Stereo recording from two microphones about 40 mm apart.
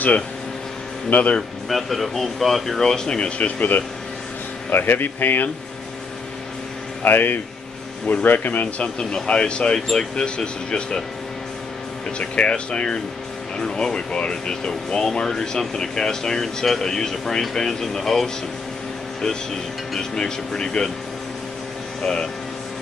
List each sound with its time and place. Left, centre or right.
1.1 s speech: left
1.7 s speech: centre
3.2 s speech: left
4.6 s speech: left
7.0 s speech: left
8.8 s speech: left
12.2 s speech: left; by 18.3 s centre
20.0 s speech: centre
22.0 s speech: left